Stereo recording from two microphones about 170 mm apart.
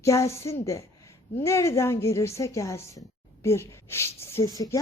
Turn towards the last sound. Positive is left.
turn(degrees=20)  # may be behind; listen again after turning